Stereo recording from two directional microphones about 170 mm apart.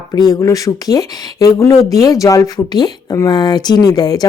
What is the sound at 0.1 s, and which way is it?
Speech, 20° left (ahead or behind).